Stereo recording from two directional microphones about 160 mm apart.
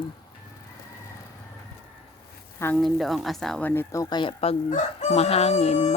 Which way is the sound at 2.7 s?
Centre (ahead or behind).